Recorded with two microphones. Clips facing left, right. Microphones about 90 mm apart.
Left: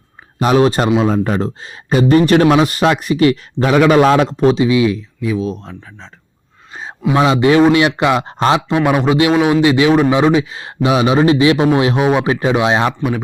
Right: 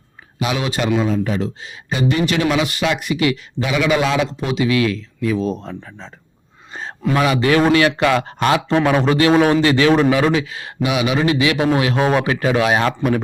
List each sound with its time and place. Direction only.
0.3 s speech: 40° left (ahead or behind)
4.5 s speech: 20° left (ahead or behind)
5.3 s a man's voice: centre (ahead or behind)
7.1 s a man's voice: 25° left (ahead or behind)
8.7 s a man's voice: 15° left (ahead or behind)
13.0 s speech: 5° left (ahead or behind)